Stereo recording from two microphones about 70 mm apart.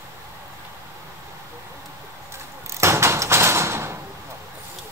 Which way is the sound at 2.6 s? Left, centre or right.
Right.